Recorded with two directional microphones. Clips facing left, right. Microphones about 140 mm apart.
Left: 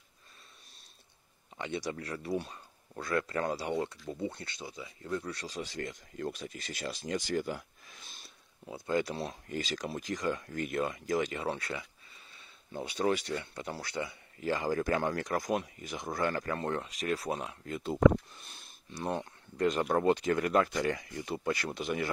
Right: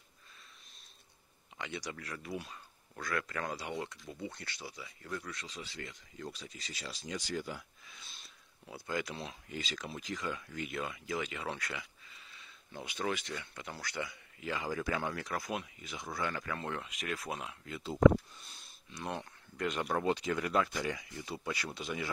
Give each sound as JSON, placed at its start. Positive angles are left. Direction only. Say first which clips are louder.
{"t": 1.6, "sound": "speech", "louder": "left 6 dB", "side_deg": 25}
{"t": 8.6, "sound": "speech", "louder": "left 6 dB", "side_deg": 25}
{"t": 18.4, "sound": "a sound", "louder": "left 3 dB", "side_deg": 60}
{"t": 18.9, "sound": "speech", "louder": "left 5 dB", "side_deg": 35}